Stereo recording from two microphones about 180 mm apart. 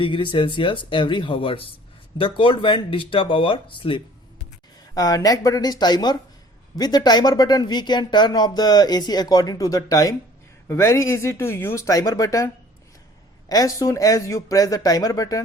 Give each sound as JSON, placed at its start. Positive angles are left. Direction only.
{"t": 0.0, "sound": "speech", "side_deg": 25}
{"t": 13.5, "sound": "speech", "side_deg": 20}